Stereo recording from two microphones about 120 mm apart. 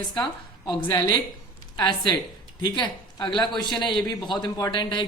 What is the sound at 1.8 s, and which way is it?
A man's voice, 40° left (ahead or behind).